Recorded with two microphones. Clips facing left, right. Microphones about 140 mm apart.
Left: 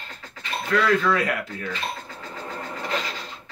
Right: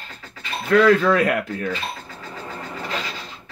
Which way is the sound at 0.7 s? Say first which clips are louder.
Right 6 dB; 50° right (ahead or behind).